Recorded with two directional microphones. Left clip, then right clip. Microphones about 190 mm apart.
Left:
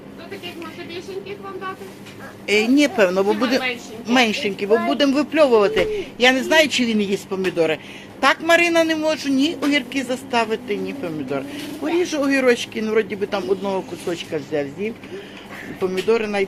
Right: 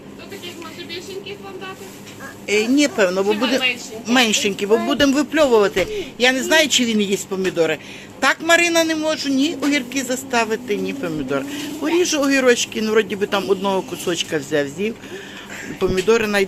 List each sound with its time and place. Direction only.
2.5 s speech: 10° left (ahead or behind)
4.1 s a man's voice: 10° right (ahead or behind)